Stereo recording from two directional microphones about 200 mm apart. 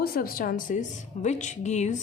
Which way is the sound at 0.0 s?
45° left (ahead or behind).